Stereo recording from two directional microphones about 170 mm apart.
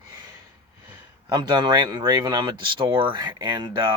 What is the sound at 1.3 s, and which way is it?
Speech, 25° right (ahead or behind).